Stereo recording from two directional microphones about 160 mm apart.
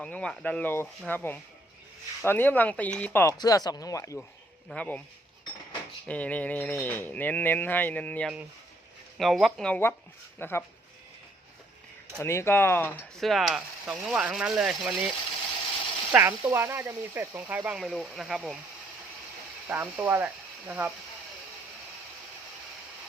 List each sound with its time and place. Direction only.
0.0 s speech: 5° left (ahead or behind)
3.3 s speech: 25° left (ahead or behind)
4.7 s speech: 10° left (ahead or behind)
6.1 s speech: 10° left (ahead or behind)
12.2 s speech: 15° left (ahead or behind)
13.2 s speech: centre (ahead or behind)
16.1 s speech: 15° right (ahead or behind)
19.6 s speech: 15° right (ahead or behind)